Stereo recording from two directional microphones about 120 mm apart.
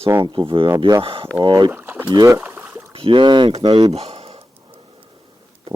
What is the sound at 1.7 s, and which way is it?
Boat, 20° right (ahead or behind).